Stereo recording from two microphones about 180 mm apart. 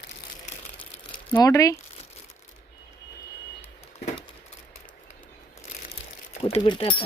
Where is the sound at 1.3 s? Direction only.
15° left (ahead or behind).